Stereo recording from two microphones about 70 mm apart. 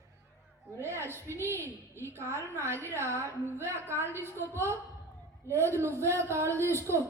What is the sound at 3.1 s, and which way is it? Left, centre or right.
A woman's voice, right.